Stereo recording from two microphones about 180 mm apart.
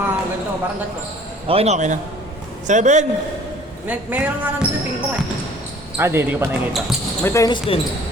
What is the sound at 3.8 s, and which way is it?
Speech, 10° right (ahead or behind).